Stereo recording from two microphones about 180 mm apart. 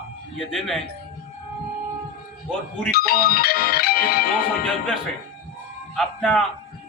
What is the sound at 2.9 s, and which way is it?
Music, 55° left (ahead or behind).